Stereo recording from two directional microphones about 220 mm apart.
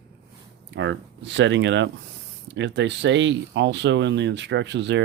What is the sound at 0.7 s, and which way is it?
Speech, 55° right (ahead or behind).